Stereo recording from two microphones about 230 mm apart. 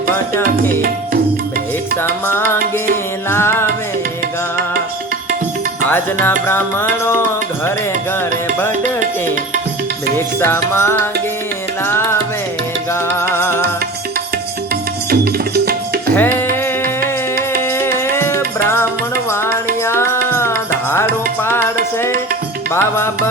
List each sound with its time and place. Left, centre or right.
0.3 s music: centre
2.0 s music: centre
5.9 s music: centre
10.2 s music: centre
12.9 s music: centre
15.1 s tabla: right
16.1 s music: centre
17.7 s music: centre